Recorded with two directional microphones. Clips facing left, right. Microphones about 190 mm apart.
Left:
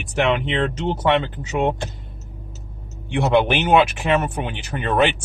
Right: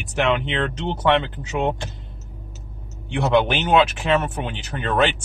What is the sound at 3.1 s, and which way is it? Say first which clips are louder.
Speech: left 1 dB; 10° left (ahead or behind).